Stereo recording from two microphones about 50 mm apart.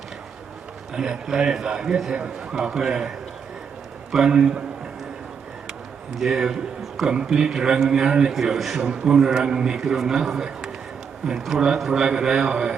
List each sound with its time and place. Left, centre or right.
0.9 s a man's voice: centre
4.1 s a man's voice: centre
6.1 s a man's voice: centre
8.8 s a man's voice: centre